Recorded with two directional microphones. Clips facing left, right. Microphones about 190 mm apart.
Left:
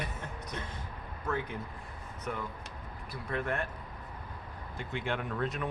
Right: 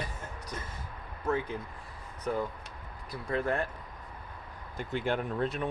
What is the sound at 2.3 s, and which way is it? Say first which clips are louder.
Speech: right 6 dB; 35° right (ahead or behind).